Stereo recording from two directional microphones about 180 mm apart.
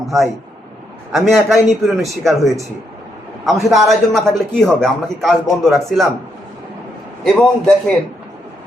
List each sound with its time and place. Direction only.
0.0 s a sound: 15° right (ahead or behind)
1.1 s a man's voice: centre (ahead or behind)
7.3 s a man's voice: centre (ahead or behind)